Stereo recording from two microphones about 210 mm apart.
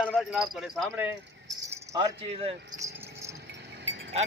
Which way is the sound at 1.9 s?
25° right (ahead or behind).